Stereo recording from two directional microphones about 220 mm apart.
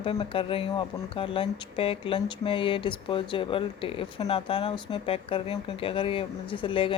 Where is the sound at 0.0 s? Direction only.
25° left (ahead or behind).